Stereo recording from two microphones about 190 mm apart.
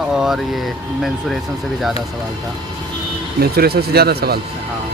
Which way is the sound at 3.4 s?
55° right (ahead or behind).